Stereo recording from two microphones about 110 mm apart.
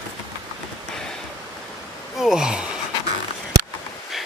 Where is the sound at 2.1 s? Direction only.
5° right (ahead or behind).